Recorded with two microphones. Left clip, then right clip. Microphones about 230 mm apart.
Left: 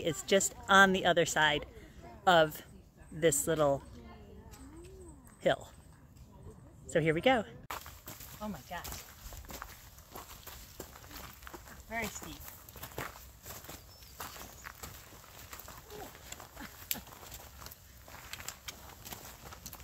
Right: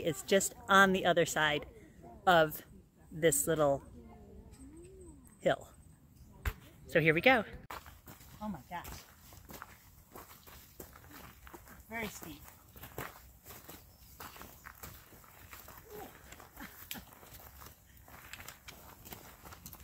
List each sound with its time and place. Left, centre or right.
0.0 s speech: centre
5.4 s speech: centre
6.9 s speech: centre
7.6 s a sound: left
11.5 s a sound: centre
12.8 s walk: left
14.1 s walk: centre